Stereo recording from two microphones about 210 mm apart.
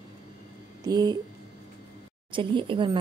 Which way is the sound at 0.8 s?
20° right (ahead or behind).